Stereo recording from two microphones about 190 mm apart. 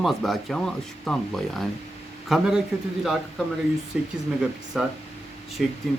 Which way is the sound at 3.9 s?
5° right (ahead or behind).